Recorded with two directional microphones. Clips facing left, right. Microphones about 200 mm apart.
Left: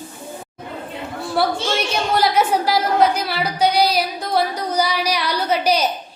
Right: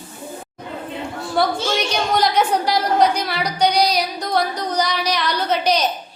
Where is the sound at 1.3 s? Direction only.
5° left (ahead or behind).